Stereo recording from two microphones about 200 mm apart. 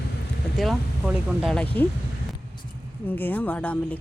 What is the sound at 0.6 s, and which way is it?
Speech, centre (ahead or behind).